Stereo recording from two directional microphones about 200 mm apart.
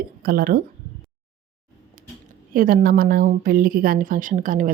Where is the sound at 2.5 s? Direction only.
45° right (ahead or behind).